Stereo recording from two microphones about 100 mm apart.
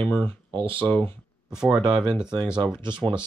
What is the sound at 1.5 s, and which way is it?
Speech, 5° right (ahead or behind).